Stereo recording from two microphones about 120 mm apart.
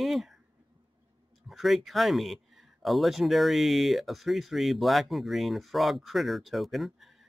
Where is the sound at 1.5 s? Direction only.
Centre (ahead or behind).